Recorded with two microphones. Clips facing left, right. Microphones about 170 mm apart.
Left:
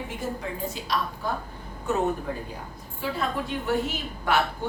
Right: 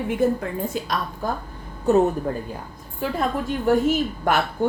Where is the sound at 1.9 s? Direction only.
35° right (ahead or behind).